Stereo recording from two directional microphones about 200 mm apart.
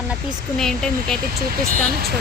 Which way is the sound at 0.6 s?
Centre (ahead or behind).